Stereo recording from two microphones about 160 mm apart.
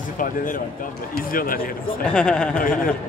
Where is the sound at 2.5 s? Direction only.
55° left (ahead or behind).